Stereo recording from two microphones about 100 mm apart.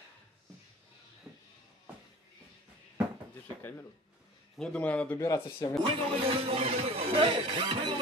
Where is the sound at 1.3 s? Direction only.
5° right (ahead or behind).